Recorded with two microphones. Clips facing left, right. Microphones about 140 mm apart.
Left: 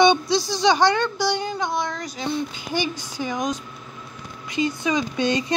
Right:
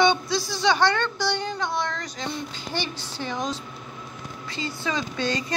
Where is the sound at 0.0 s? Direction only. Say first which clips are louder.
Left 4 dB; 15° left (ahead or behind).